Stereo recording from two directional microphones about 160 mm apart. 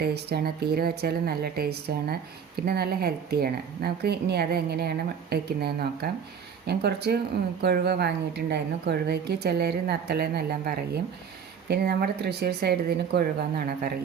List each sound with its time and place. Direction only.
0.0 s speech: 85° right
6.7 s speech: 90° right; by 13.9 s 70° right (ahead or behind)